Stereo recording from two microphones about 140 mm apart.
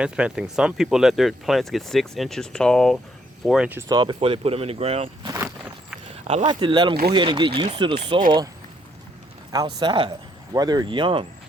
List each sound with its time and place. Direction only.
0.0 s speech: 10° right (ahead or behind)
3.8 s speech: 30° right (ahead or behind)
5.4 s walk: 15° right (ahead or behind)
6.2 s speech: 40° right (ahead or behind)
9.5 s speech: 30° right (ahead or behind)